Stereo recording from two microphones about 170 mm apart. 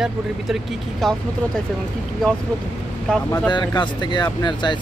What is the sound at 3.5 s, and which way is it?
Speech, 25° left (ahead or behind).